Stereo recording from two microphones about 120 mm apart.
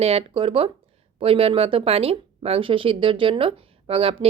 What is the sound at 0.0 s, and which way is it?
Speech, 55° right (ahead or behind).